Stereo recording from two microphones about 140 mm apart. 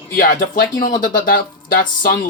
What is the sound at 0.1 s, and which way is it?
Speech, 80° left.